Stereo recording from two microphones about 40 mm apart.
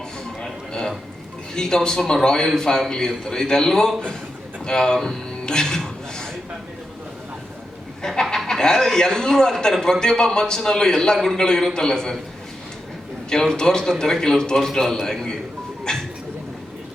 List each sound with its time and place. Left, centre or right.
0.7 s a sound: centre
1.5 s a man's voice: centre
4.9 s music: centre
8.0 s a man's voice: centre
13.3 s a man's voice: centre